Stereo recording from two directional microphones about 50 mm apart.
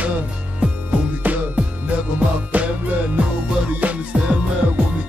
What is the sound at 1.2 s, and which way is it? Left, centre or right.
Music, right.